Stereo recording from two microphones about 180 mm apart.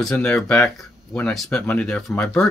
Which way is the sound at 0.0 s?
5° left (ahead or behind).